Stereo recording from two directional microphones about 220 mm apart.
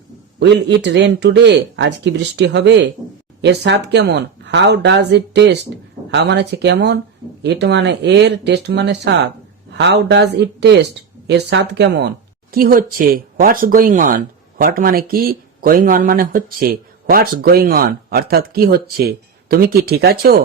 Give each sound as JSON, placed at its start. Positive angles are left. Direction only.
{"t": 0.3, "sound": "speech", "side_deg": -50}